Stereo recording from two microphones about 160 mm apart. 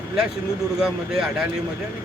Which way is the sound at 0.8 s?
5° right (ahead or behind).